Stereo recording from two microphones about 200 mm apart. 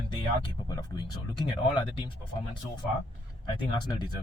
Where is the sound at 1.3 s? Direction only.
20° left (ahead or behind).